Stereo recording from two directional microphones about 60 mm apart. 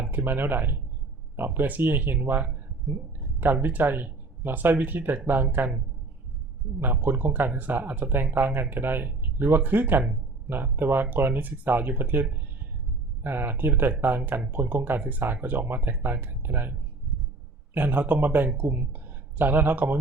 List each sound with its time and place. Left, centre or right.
0.0 s speech: right
13.2 s speech: right
17.7 s speech: right